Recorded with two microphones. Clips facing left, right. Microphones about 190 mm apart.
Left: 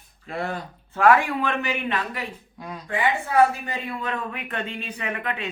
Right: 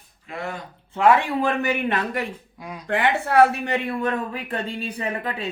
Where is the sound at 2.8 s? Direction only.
70° right (ahead or behind).